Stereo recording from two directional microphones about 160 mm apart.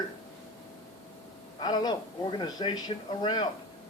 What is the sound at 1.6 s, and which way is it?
A man's voice, 25° left (ahead or behind).